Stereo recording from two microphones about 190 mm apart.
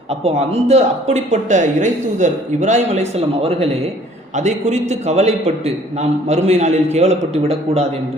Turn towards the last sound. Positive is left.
turn(degrees=-30)  # may be behind; listen again after turning